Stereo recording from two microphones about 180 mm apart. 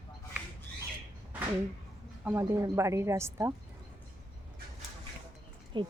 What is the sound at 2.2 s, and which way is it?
A woman's voice, 15° right (ahead or behind).